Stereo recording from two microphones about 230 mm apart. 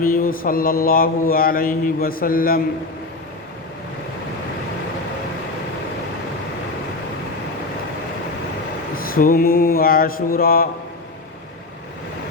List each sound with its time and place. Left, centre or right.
0.0 s mantra: left
9.0 s mantra: left